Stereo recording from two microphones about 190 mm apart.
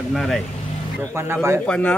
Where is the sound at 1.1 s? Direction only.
10° right (ahead or behind).